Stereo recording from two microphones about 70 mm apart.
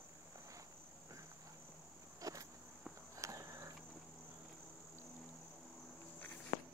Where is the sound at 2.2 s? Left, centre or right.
Right.